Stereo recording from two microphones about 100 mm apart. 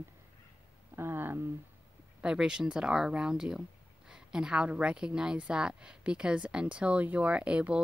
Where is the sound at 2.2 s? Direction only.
10° right (ahead or behind).